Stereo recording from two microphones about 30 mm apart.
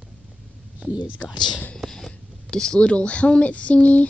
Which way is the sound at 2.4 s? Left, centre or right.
Left.